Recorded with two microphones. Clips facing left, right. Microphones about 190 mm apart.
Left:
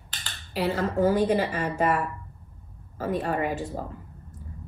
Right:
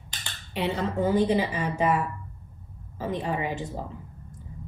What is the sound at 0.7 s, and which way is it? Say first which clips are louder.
Speech: left 2 dB; 20° right (ahead or behind).